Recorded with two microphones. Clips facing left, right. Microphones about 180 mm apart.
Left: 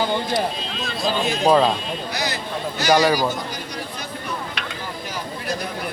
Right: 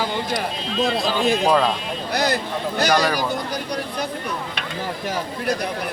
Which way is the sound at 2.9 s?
10° left (ahead or behind).